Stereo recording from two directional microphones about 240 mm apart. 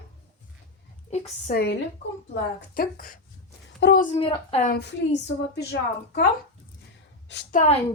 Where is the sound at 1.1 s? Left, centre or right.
Left.